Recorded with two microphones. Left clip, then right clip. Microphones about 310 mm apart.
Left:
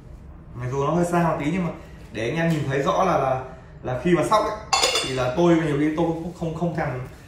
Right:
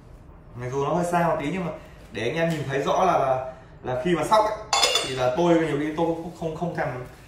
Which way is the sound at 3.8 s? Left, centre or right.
Centre.